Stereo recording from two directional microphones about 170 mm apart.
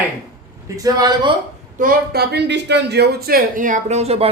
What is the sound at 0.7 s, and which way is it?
Speech, 20° right (ahead or behind).